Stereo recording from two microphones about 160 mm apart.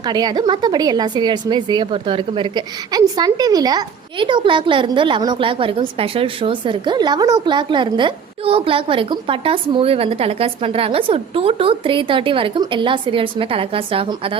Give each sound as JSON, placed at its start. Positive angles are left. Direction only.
{"t": 0.0, "sound": "a woman's voice", "side_deg": -25}